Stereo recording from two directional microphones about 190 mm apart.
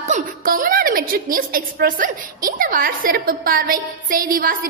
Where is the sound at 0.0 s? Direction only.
45° right (ahead or behind).